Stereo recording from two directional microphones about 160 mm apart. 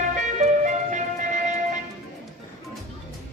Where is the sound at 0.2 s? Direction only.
50° right (ahead or behind).